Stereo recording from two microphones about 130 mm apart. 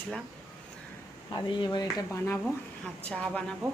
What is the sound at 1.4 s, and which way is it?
Speech, 30° left (ahead or behind).